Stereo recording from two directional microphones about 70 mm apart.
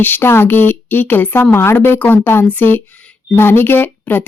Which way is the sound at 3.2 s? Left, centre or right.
Left.